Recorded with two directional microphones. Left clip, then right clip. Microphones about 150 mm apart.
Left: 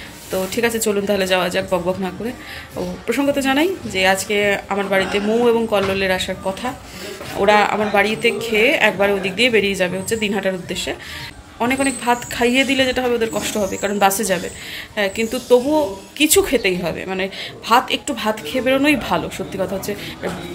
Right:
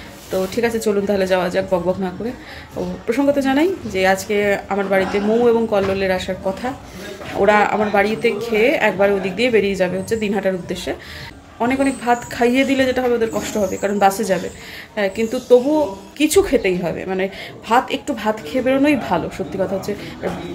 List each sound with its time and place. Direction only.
0.3 s a woman's voice: 10° right (ahead or behind)